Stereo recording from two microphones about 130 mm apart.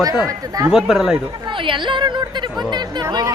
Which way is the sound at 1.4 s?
40° right (ahead or behind).